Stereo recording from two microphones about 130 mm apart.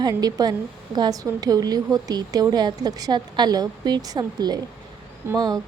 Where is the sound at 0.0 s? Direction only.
30° right (ahead or behind).